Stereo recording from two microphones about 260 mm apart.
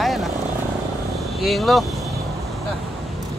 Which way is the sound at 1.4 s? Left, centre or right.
Centre.